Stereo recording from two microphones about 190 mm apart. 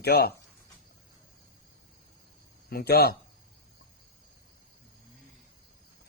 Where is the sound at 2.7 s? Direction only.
55° left (ahead or behind).